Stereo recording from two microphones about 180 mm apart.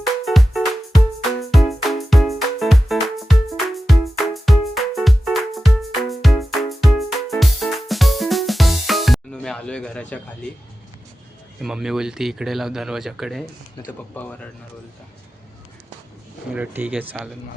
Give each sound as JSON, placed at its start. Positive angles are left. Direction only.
{"t": 0.3, "sound": "music", "side_deg": 0}
{"t": 11.6, "sound": "speech", "side_deg": 0}
{"t": 13.8, "sound": "speech", "side_deg": 10}
{"t": 16.5, "sound": "speech", "side_deg": -10}